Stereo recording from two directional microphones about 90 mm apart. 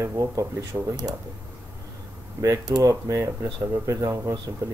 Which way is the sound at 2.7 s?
45° right (ahead or behind).